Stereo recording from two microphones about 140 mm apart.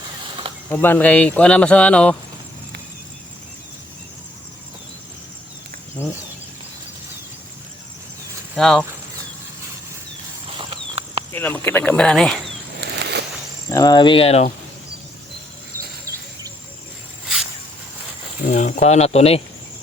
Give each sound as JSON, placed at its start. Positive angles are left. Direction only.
{"t": 0.7, "sound": "speech", "side_deg": 15}
{"t": 8.5, "sound": "speech", "side_deg": 5}
{"t": 10.6, "sound": "a sound", "side_deg": -40}
{"t": 11.3, "sound": "speech", "side_deg": 15}
{"t": 13.7, "sound": "speech", "side_deg": 25}
{"t": 18.4, "sound": "pulleys", "side_deg": 60}